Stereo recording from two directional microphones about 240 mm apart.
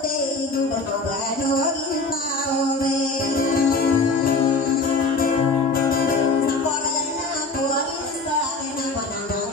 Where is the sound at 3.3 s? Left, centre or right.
Left.